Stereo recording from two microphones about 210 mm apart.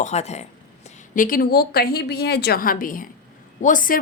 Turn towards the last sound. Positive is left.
turn(degrees=40)  # may be behind; listen again after turning